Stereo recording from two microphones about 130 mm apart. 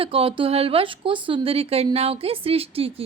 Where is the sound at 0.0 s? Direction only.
45° right (ahead or behind).